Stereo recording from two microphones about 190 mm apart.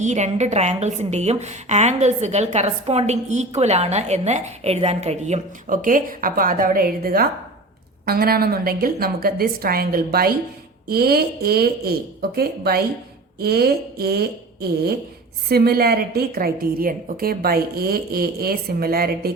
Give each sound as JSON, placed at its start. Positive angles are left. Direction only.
{"t": 0.0, "sound": "a woman's voice", "side_deg": -35}